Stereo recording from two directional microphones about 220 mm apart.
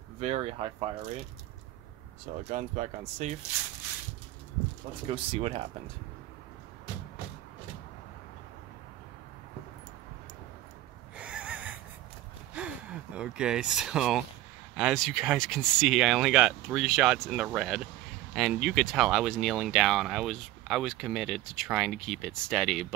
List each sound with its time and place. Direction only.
0.2 s speech: 30° right (ahead or behind)
2.5 s speech: 35° right (ahead or behind)
5.0 s speech: 25° right (ahead or behind)
11.1 s snort: 5° right (ahead or behind)
12.5 s speech: 5° right (ahead or behind)